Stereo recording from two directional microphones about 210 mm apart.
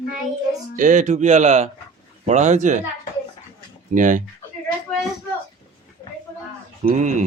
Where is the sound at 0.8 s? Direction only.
35° right (ahead or behind).